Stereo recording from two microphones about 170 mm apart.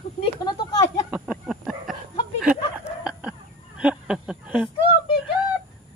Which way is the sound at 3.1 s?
5° right (ahead or behind).